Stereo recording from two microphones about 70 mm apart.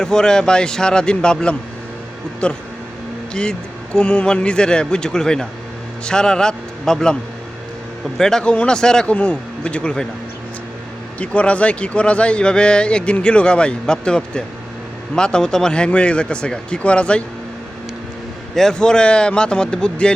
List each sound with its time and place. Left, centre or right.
0.0 s a man's voice: centre
3.9 s a man's voice: centre
8.2 s a man's voice: centre
11.2 s a man's voice: centre
18.5 s a man's voice: centre